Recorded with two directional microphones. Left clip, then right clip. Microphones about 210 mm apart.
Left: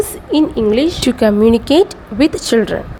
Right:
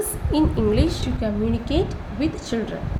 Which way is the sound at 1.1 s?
50° left (ahead or behind).